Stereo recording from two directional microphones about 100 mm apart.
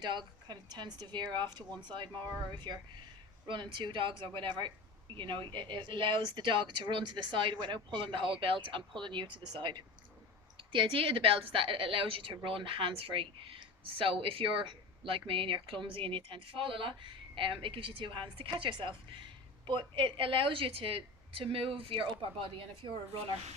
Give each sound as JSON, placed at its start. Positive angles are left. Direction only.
{"t": 0.0, "sound": "speech", "side_deg": -45}
{"t": 3.4, "sound": "a woman's voice", "side_deg": -50}